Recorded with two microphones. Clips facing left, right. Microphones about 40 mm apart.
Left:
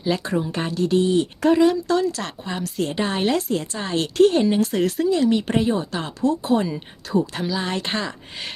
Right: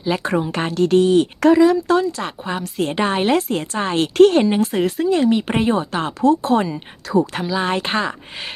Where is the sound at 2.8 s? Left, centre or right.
Right.